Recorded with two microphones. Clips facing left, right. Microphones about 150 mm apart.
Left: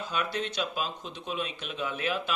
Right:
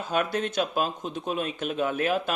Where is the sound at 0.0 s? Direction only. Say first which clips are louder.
Right 5 dB; 50° right (ahead or behind).